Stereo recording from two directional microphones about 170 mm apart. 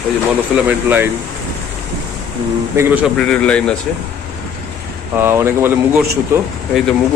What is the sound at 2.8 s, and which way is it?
Speech, 10° right (ahead or behind).